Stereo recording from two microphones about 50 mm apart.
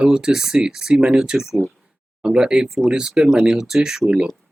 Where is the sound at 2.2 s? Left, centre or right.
Centre.